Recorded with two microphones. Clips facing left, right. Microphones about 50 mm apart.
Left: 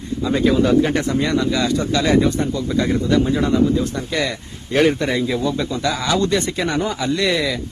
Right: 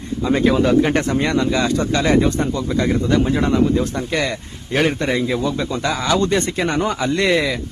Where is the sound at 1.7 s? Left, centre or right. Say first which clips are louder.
Left 1 dB; right.